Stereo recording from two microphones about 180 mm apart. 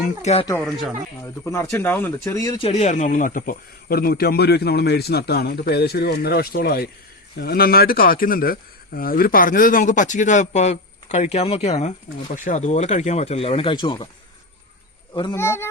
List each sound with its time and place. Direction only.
0.0 s speech: 40° left (ahead or behind)
0.6 s speech: centre (ahead or behind)
1.2 s speech: 15° left (ahead or behind)
2.6 s a man's voice: 35° left (ahead or behind)
15.1 s a man's voice: 25° left (ahead or behind)
15.4 s speech: 15° left (ahead or behind)